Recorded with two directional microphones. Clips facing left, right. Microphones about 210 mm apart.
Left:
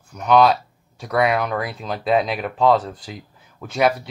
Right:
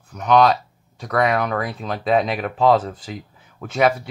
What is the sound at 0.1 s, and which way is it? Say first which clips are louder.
Speech: even; centre (ahead or behind).